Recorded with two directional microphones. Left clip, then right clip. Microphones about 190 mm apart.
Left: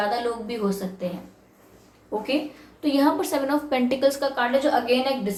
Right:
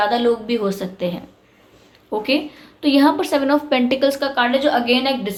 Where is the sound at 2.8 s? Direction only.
40° right (ahead or behind).